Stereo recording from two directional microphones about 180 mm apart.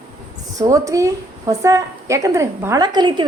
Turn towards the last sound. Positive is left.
turn(degrees=-25)  # may be behind; listen again after turning